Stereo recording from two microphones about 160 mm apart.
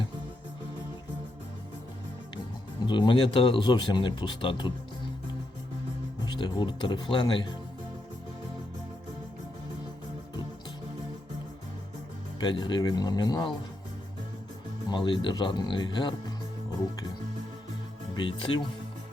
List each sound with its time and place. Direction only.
2.8 s speech: 30° left (ahead or behind)
6.2 s speech: 30° left (ahead or behind)
12.4 s speech: 30° left (ahead or behind)
14.8 s speech: 30° left (ahead or behind)
18.1 s speech: 30° left (ahead or behind)